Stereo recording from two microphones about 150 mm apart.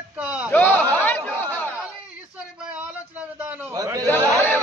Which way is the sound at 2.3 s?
5° right (ahead or behind).